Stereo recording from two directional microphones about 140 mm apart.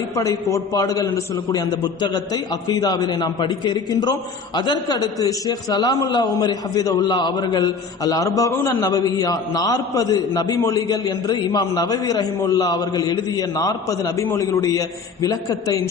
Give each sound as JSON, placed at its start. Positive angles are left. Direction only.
{"t": 0.1, "sound": "a man's voice", "side_deg": 25}